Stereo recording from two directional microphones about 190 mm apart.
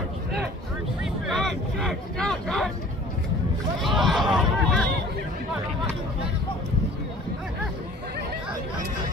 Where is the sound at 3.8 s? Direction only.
Centre (ahead or behind).